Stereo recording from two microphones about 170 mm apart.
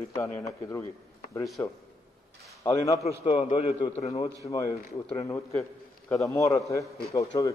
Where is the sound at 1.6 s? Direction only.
15° left (ahead or behind).